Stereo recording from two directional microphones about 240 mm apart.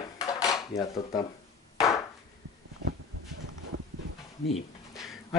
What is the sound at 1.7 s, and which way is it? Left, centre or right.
Chop, centre.